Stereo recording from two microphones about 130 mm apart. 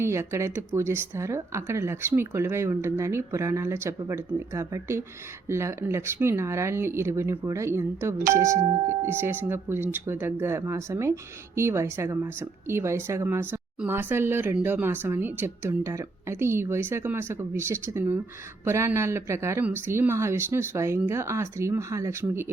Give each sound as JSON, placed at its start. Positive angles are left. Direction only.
{"t": 0.0, "sound": "speech", "side_deg": -20}